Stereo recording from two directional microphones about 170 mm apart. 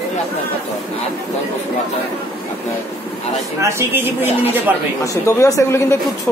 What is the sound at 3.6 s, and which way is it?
Speech, 15° right (ahead or behind).